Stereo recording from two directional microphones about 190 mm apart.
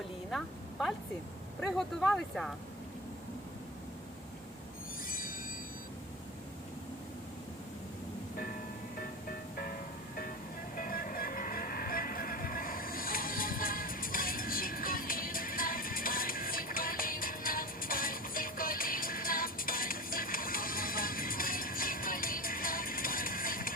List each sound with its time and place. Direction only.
0.3 s a sound: centre (ahead or behind)
2.0 s speech: 5° left (ahead or behind)
5.0 s train: 50° left (ahead or behind)
10.8 s music: 50° left (ahead or behind)